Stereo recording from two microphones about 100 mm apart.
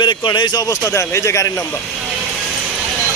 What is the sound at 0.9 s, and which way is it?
Speech, 30° left (ahead or behind).